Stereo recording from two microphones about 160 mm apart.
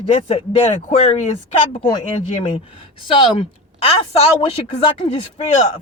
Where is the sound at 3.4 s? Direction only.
35° left (ahead or behind).